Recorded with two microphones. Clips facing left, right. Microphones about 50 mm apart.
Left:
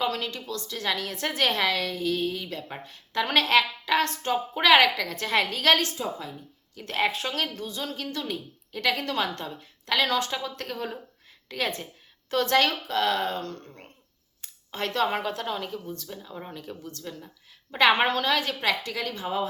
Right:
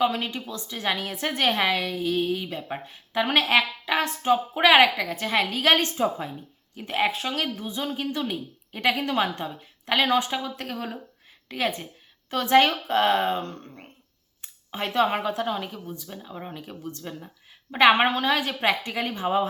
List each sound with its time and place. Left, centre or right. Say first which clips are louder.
0.0 s a woman's voice: right 4 dB; centre
5.7 s speech: right 3 dB; right
6.8 s a woman's voice: right 2 dB; centre
7.6 s a woman's voice: right 4 dB; centre
12.5 s a woman's voice: right 7 dB; right
14.4 s a woman's voice: right 1 dB; centre
18.6 s a woman's voice: right 3 dB; right